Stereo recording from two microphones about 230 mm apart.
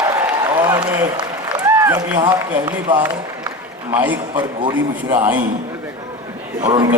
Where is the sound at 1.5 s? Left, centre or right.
Centre.